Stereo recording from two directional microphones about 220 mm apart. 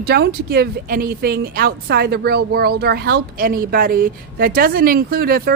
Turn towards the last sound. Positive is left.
turn(degrees=-40)  # may be behind; listen again after turning